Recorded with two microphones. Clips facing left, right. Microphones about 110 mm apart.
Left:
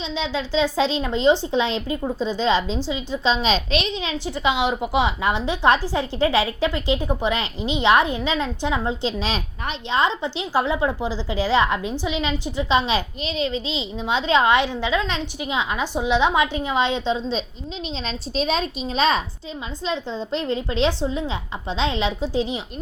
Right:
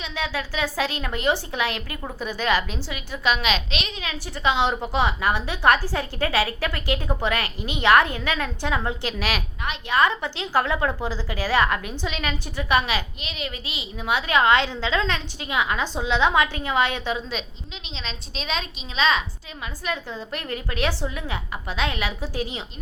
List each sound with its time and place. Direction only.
0.0 s a woman's voice: 20° left (ahead or behind)
3.9 s a woman's voice: 20° left (ahead or behind)
17.9 s a woman's voice: 40° left (ahead or behind)
19.8 s a woman's voice: 25° left (ahead or behind)